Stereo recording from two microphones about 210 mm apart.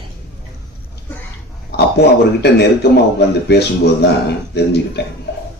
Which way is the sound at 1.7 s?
50° left (ahead or behind).